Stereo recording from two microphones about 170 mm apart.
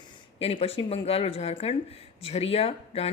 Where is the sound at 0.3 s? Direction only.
35° left (ahead or behind).